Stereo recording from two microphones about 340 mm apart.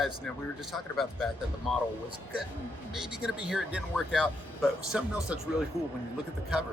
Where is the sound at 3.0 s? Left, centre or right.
Centre.